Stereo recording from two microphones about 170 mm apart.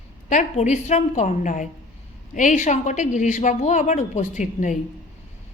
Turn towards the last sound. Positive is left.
turn(degrees=45)  # may be behind; listen again after turning